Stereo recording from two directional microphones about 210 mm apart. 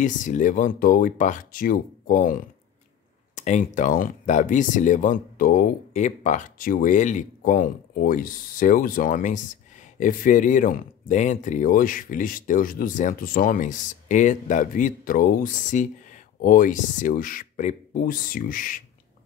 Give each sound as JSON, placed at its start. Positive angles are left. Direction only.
{"t": 0.0, "sound": "speech", "side_deg": 35}